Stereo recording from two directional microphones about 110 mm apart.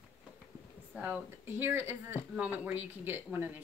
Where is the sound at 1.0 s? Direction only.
15° right (ahead or behind).